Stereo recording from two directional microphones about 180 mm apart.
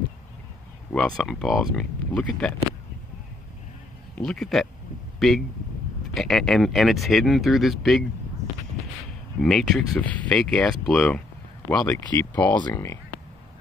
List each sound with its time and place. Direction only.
0.9 s speech: 5° left (ahead or behind)
4.1 s speech: 5° left (ahead or behind)
9.4 s speech: centre (ahead or behind)
12.2 s speech: 20° left (ahead or behind)